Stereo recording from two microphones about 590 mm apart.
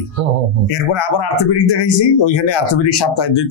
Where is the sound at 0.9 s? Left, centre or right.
Left.